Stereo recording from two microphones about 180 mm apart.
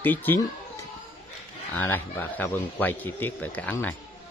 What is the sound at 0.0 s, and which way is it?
Speech, 10° left (ahead or behind).